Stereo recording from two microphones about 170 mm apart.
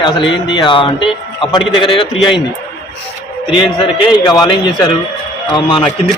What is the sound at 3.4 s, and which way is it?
Speech, 30° left (ahead or behind).